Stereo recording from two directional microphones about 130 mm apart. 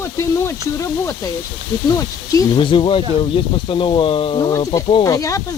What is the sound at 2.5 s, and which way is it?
Speech, 40° left (ahead or behind).